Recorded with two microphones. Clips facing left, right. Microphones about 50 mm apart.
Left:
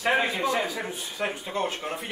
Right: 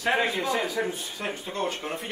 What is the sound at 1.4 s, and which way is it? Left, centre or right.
Speech, centre.